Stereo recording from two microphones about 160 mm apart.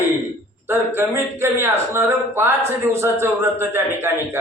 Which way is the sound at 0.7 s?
15° right (ahead or behind).